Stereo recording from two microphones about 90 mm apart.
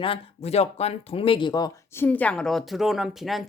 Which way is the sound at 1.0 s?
90° left.